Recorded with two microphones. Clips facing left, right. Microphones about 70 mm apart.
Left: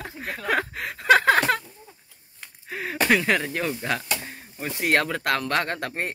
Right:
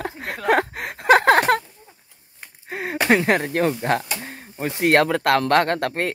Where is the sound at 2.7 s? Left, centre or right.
Right.